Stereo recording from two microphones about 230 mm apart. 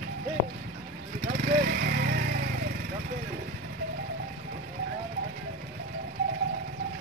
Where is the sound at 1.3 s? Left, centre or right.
Right.